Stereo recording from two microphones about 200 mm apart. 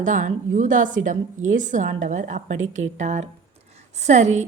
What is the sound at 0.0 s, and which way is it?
A woman's voice, 40° right (ahead or behind).